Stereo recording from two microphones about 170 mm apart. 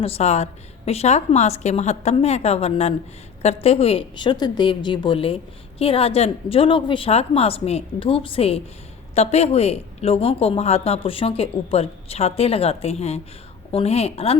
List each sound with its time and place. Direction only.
0.0 s a woman's voice: 40° left (ahead or behind)